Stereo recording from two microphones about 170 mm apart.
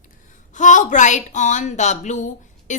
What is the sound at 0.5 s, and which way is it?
A woman's voice, 45° left (ahead or behind).